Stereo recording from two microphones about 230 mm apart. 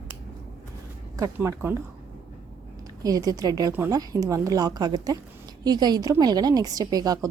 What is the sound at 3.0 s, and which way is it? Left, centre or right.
Speech, centre.